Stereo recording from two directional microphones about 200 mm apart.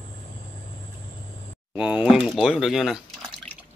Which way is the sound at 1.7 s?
5° right (ahead or behind).